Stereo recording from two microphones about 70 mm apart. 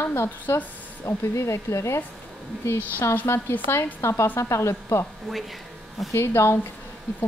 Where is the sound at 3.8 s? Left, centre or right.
Left.